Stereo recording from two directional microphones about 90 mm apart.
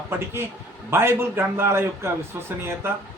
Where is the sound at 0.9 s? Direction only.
25° right (ahead or behind).